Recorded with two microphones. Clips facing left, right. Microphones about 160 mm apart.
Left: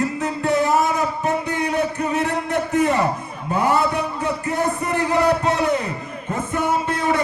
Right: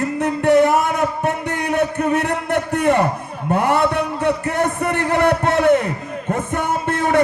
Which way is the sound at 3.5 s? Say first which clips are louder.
Right 2 dB; 65° right (ahead or behind).